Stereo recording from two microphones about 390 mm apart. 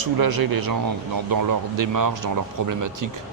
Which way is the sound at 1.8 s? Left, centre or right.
Right.